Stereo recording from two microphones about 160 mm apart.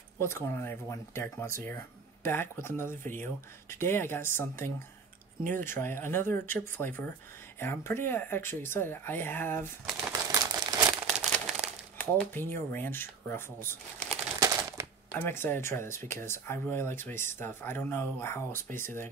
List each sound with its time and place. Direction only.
0.2 s speech: 15° left (ahead or behind)
9.8 s shuffling cards: 5° right (ahead or behind)
10.3 s crumpling: 25° right (ahead or behind)
11.1 s crumpling: centre (ahead or behind)
12.0 s speech: 10° left (ahead or behind)
14.4 s a sound: 20° right (ahead or behind)
15.1 s speech: 15° left (ahead or behind)